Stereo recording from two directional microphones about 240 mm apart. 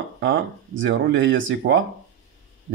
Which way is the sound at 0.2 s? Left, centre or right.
Right.